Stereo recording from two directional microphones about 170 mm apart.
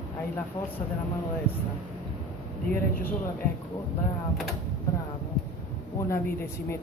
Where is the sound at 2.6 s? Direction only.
60° left (ahead or behind).